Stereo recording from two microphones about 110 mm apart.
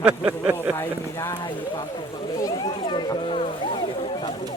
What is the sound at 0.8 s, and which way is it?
Speech, 25° left (ahead or behind).